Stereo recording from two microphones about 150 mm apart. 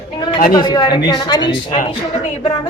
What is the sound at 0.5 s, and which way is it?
A man's voice, 30° left (ahead or behind).